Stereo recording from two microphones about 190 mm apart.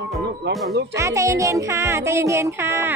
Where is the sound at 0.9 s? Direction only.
15° right (ahead or behind).